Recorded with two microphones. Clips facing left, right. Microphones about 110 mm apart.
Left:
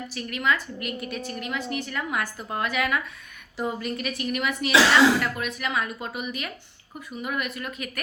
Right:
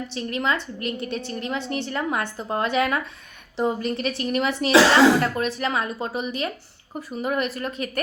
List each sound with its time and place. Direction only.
0.1 s a woman's voice: 30° right (ahead or behind)